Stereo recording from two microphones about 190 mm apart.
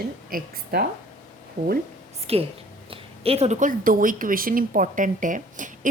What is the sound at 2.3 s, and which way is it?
A woman's voice, 30° right (ahead or behind).